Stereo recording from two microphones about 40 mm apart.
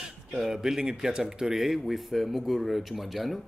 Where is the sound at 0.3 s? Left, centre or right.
Centre.